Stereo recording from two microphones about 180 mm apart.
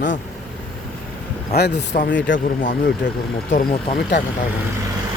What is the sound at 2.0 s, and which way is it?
Speech, 90° left.